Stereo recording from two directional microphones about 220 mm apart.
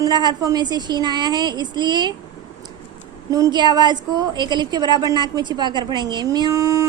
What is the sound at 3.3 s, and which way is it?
A woman's voice, 20° right (ahead or behind).